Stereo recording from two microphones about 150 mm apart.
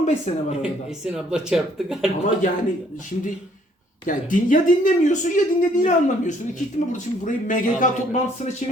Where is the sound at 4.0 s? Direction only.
60° left (ahead or behind).